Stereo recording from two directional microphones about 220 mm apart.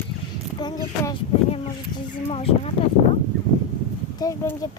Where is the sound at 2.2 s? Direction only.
25° left (ahead or behind).